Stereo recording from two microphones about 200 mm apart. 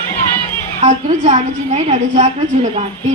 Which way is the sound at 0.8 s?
35° right (ahead or behind).